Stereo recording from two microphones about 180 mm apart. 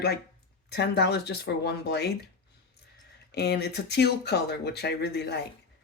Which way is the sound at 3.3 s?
65° left (ahead or behind).